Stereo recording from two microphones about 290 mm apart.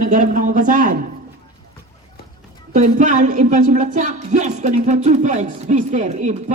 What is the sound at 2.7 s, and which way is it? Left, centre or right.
Speech, right.